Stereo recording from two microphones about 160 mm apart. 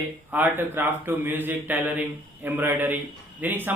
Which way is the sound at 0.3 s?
10° right (ahead or behind).